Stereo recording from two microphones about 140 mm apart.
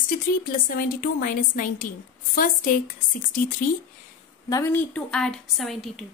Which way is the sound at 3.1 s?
80° left.